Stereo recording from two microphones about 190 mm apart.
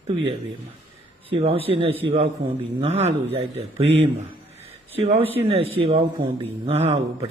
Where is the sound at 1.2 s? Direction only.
30° right (ahead or behind).